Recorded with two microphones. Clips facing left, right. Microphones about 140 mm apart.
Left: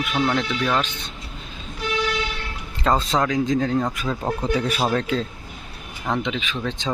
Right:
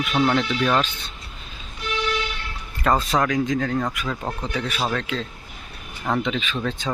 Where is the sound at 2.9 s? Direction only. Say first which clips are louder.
Even; 20° left (ahead or behind).